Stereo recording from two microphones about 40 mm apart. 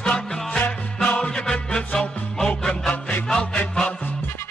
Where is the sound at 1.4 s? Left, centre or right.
Centre.